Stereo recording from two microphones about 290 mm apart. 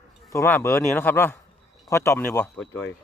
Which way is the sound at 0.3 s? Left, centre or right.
Centre.